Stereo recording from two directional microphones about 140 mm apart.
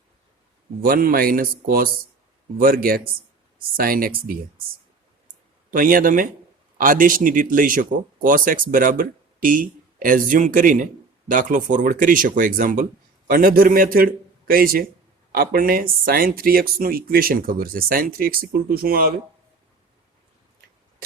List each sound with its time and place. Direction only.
0.8 s speech: 90° right
5.7 s speech: 85° right
13.2 s speech: 90° right